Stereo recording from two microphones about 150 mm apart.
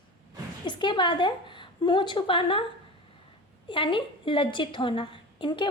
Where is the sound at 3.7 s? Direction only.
35° left (ahead or behind).